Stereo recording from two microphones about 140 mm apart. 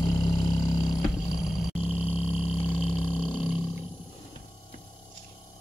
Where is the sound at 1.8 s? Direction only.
45° left (ahead or behind).